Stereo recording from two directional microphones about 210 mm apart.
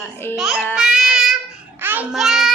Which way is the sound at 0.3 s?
Centre (ahead or behind).